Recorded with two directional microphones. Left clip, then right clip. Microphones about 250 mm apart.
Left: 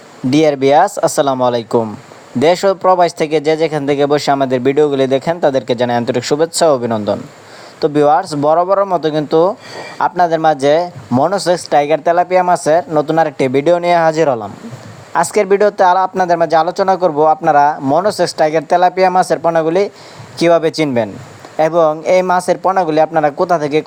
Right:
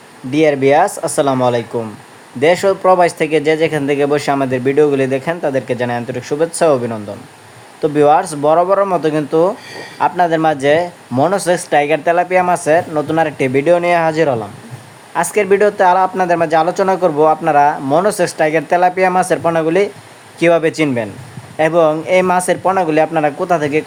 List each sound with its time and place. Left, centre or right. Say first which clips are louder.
0.3 s speech: left 1 dB; left